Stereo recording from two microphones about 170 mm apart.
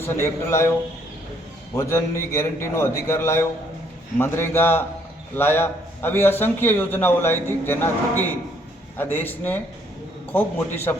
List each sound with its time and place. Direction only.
0.0 s a man's voice: 15° left (ahead or behind)
1.7 s a man's voice: 15° left (ahead or behind)